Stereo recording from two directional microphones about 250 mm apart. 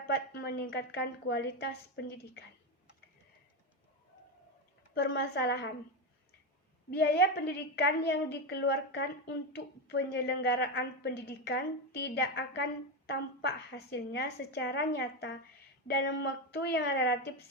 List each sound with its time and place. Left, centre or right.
0.1 s a woman's voice: left
4.9 s a woman's voice: left
6.9 s a woman's voice: left